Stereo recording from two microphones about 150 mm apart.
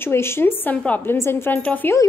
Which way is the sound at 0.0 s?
15° left (ahead or behind).